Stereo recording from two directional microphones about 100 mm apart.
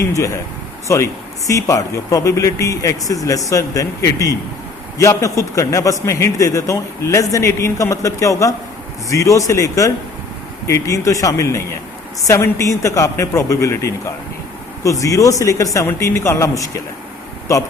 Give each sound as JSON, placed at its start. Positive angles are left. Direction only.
{"t": 0.9, "sound": "a man's voice", "side_deg": 30}